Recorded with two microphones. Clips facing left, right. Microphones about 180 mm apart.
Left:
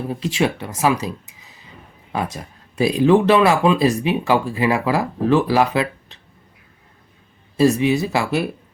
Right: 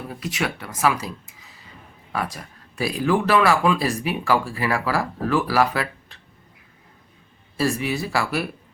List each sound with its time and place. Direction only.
0.1 s speech: 25° left (ahead or behind)
7.5 s speech: 20° left (ahead or behind)